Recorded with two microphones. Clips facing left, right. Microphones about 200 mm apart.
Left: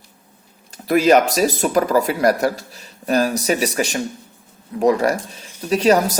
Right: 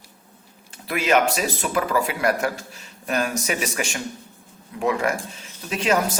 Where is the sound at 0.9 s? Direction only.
40° left (ahead or behind).